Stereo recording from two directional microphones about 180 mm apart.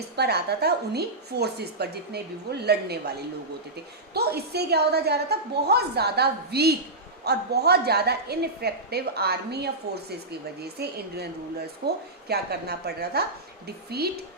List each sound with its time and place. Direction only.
0.2 s a woman's voice: 65° right (ahead or behind)